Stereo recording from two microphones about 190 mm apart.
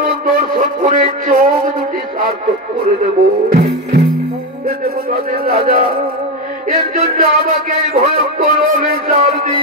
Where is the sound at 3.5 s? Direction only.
35° right (ahead or behind).